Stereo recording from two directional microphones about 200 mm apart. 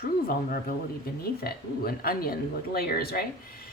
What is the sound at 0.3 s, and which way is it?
Speech, 45° left (ahead or behind).